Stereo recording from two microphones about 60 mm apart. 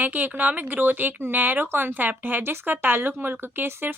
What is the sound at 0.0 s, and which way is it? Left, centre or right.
A woman's voice, right.